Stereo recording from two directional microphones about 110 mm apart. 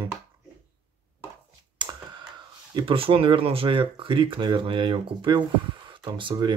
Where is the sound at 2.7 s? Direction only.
55° right (ahead or behind).